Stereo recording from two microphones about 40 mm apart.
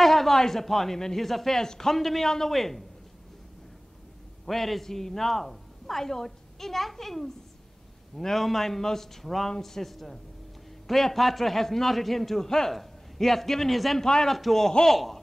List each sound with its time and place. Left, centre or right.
0.0 s speech: centre
4.5 s a man's voice: centre
14.0 s speech: centre
14.3 s a man's voice: centre